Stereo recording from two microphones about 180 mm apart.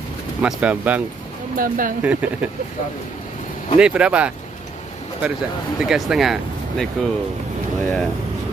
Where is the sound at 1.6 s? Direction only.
50° right (ahead or behind).